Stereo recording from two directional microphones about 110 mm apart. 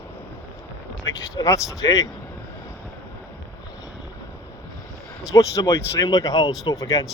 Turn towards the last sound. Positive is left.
turn(degrees=30)  # may be behind; listen again after turning